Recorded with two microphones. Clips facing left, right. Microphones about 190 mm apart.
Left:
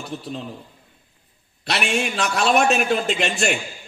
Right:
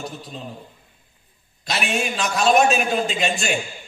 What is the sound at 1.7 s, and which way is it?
A man's voice, 65° left (ahead or behind).